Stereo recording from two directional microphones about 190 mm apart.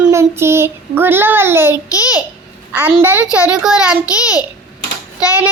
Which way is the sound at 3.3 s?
5° right (ahead or behind).